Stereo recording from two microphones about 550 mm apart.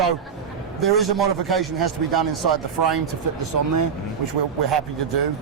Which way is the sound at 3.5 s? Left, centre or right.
Right.